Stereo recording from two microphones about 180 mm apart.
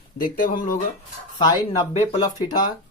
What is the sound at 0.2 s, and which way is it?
Speech, 50° left (ahead or behind).